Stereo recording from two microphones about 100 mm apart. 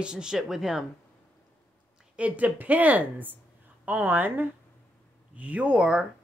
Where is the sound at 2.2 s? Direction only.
15° right (ahead or behind).